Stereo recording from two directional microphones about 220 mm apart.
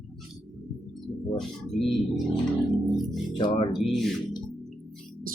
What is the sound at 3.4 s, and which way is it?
Speech, 20° left (ahead or behind).